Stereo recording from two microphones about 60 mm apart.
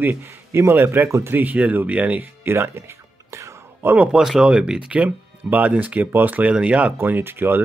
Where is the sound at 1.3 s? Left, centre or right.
Right.